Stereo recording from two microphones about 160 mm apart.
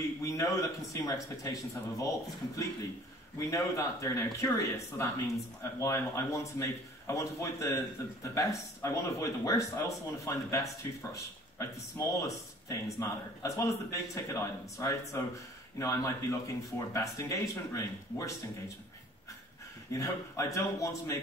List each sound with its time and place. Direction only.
0.2 s a man's voice: 20° left (ahead or behind)
3.3 s a man's voice: 20° left (ahead or behind)
19.9 s a man's voice: 20° left (ahead or behind)